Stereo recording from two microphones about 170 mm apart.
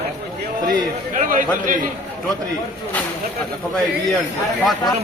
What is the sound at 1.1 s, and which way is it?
Speech, 50° right (ahead or behind).